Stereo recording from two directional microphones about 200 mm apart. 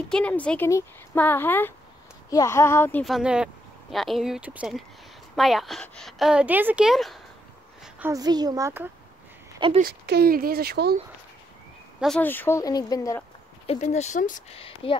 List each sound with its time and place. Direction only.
0.1 s a woman's voice: 5° left (ahead or behind)
8.1 s a woman's voice: 20° right (ahead or behind)
9.8 s speech: 50° right (ahead or behind)
12.0 s speech: 5° left (ahead or behind)
13.7 s speech: 35° left (ahead or behind)